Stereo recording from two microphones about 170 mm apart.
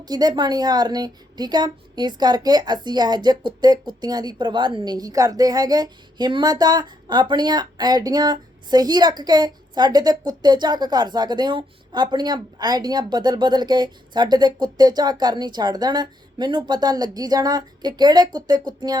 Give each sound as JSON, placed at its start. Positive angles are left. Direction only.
{"t": 0.0, "sound": "a woman's voice", "side_deg": -25}